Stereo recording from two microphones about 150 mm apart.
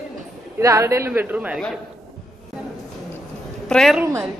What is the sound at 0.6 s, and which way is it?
A man's voice, 20° right (ahead or behind).